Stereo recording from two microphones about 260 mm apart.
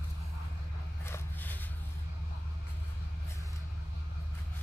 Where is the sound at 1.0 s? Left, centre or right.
Centre.